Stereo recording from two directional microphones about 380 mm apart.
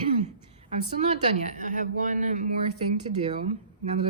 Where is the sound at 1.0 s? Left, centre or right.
Centre.